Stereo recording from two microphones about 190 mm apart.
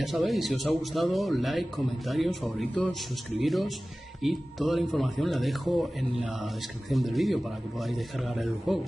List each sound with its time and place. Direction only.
0.0 s speech: centre (ahead or behind)